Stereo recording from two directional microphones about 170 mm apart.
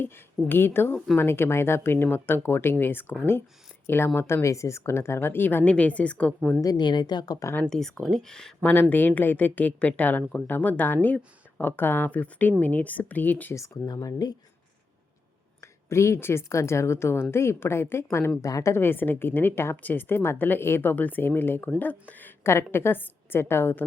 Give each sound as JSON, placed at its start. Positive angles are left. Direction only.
{"t": 0.0, "sound": "a woman's voice", "side_deg": 10}
{"t": 6.6, "sound": "speech", "side_deg": 25}
{"t": 7.6, "sound": "a woman's voice", "side_deg": 5}
{"t": 15.6, "sound": "a woman's voice", "side_deg": 15}